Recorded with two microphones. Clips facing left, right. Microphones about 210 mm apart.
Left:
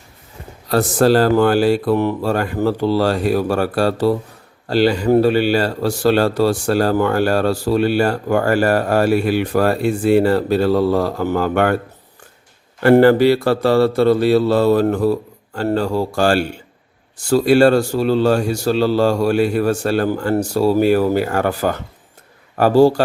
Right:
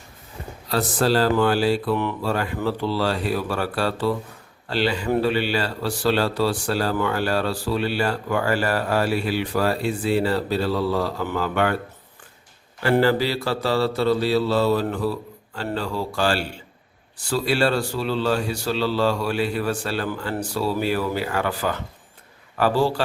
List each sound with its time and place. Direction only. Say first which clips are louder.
0.7 s a man's voice: left 7 dB; 50° left (ahead or behind)
12.8 s a man's voice: left 9 dB; 55° left (ahead or behind)